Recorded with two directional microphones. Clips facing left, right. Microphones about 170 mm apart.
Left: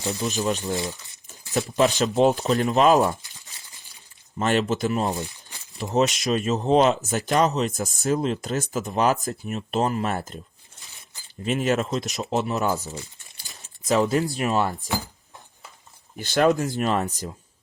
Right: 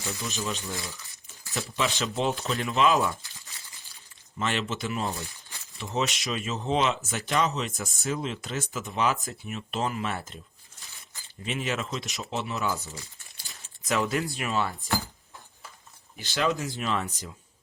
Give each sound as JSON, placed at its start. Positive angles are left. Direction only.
{"t": 0.1, "sound": "speech", "side_deg": 35}
{"t": 3.2, "sound": "a sound", "side_deg": 20}
{"t": 4.4, "sound": "speech", "side_deg": 45}
{"t": 5.2, "sound": "a sound", "side_deg": 20}
{"t": 5.7, "sound": "speech", "side_deg": 40}
{"t": 16.1, "sound": "speech", "side_deg": 45}